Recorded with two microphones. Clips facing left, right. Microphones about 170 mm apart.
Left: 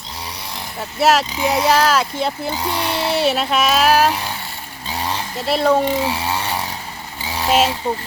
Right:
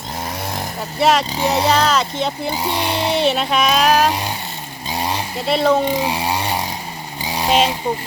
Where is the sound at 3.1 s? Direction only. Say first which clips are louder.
Even; 5° left (ahead or behind).